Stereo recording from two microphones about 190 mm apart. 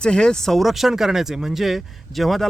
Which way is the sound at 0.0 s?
5° left (ahead or behind).